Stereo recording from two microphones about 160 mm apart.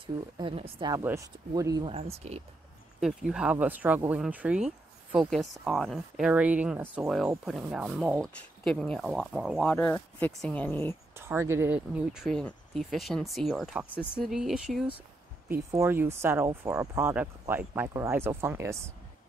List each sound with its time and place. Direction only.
0.0 s speech: 30° right (ahead or behind)
1.9 s speech: 40° right (ahead or behind)
3.0 s speech: 5° right (ahead or behind)
8.2 s speech: 5° left (ahead or behind)
9.7 s speech: 10° left (ahead or behind)
11.1 s speech: 15° right (ahead or behind)
15.4 s speech: 15° right (ahead or behind)